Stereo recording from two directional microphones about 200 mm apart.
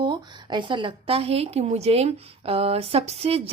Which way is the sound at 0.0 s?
25° right (ahead or behind).